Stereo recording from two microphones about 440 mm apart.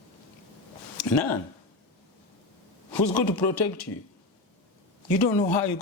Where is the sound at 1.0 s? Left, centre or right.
Left.